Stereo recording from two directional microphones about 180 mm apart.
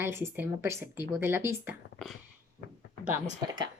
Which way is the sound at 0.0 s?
15° right (ahead or behind).